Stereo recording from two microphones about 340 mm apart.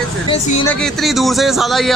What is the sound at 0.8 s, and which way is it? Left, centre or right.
Speech, centre.